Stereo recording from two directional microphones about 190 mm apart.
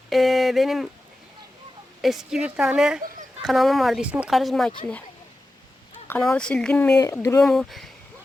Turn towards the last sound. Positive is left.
turn(degrees=0)  # may be behind; listen again after turning